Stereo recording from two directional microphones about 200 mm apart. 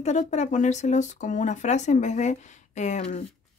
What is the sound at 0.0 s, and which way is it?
Speech, 35° left (ahead or behind).